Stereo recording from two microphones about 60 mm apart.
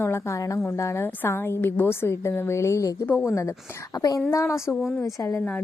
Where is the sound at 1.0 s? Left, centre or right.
Left.